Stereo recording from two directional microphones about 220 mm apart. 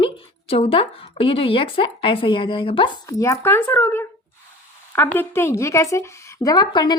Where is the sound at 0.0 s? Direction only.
25° left (ahead or behind).